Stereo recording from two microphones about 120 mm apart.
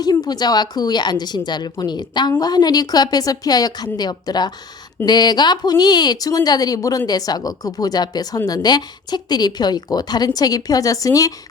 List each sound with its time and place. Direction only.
0.0 s a woman's voice: 35° left (ahead or behind)